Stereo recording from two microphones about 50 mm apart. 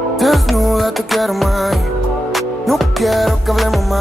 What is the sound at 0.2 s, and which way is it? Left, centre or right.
Music, centre.